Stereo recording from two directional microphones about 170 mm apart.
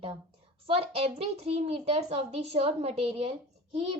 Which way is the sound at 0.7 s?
35° right (ahead or behind).